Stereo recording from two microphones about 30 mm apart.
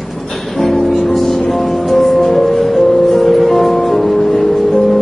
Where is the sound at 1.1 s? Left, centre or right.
Centre.